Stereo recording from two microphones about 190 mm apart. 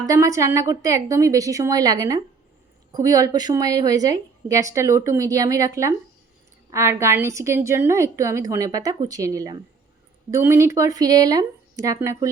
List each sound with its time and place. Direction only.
0.0 s a woman's voice: 15° right (ahead or behind)